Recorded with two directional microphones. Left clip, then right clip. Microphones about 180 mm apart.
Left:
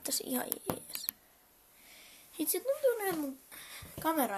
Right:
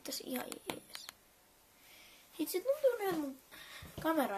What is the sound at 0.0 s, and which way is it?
Speech, 35° left (ahead or behind).